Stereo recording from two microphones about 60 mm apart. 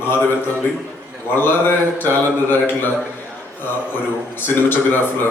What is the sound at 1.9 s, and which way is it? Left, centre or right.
Speech, left.